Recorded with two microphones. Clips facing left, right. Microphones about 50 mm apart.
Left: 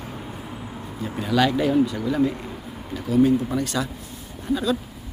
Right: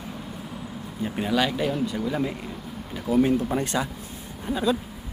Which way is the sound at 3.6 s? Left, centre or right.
Right.